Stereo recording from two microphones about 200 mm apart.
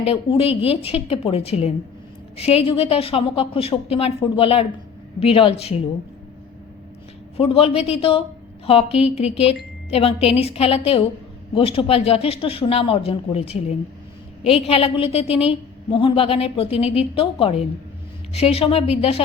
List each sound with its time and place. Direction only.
0.0 s a woman's voice: 30° left (ahead or behind)
7.3 s a woman's voice: 30° left (ahead or behind)